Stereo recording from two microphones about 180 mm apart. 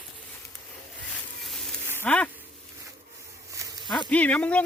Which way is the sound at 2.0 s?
10° left (ahead or behind).